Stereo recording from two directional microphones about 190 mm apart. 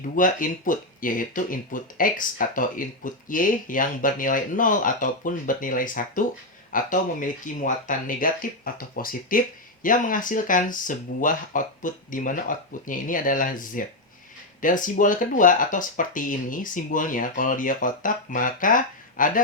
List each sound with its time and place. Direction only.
0.2 s speech: 45° left (ahead or behind)